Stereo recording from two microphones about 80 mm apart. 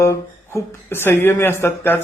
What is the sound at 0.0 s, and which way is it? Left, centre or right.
Speech, left.